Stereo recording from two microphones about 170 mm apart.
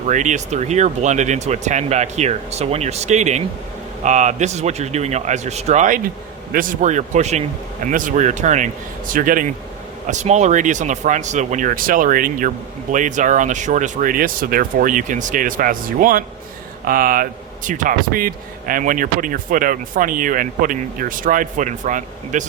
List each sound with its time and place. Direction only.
0.1 s a man's voice: 45° right (ahead or behind)